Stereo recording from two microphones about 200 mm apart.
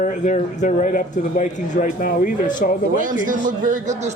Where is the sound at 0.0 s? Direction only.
40° left (ahead or behind).